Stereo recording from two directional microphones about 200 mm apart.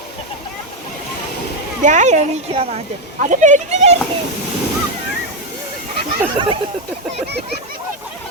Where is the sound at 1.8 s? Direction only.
35° right (ahead or behind).